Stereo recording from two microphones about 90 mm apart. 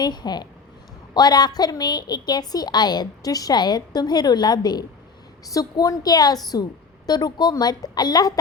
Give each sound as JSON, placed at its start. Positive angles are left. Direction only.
{"t": 0.0, "sound": "a woman's voice", "side_deg": 50}